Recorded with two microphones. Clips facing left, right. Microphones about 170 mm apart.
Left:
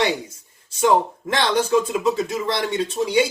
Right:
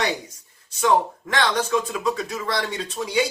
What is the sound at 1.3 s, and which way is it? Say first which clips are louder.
Speech: left 3 dB; 30° left (ahead or behind).